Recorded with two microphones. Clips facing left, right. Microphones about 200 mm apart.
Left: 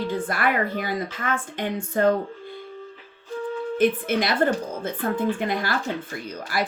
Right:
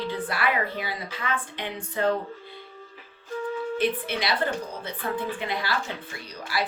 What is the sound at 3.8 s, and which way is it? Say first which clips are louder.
A woman's voice: left 8 dB; 50° left (ahead or behind).